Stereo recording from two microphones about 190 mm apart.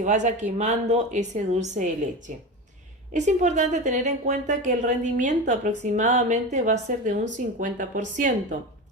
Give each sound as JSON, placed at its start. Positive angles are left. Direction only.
{"t": 0.0, "sound": "a woman's voice", "side_deg": -40}